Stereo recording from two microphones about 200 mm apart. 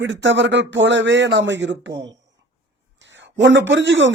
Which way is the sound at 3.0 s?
65° right (ahead or behind).